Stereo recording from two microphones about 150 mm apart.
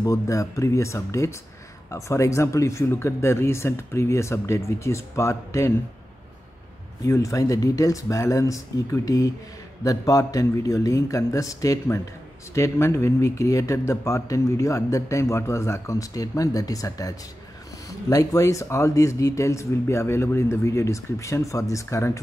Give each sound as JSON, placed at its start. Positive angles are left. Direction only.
{"t": 0.0, "sound": "speech", "side_deg": 20}
{"t": 7.1, "sound": "speech", "side_deg": 20}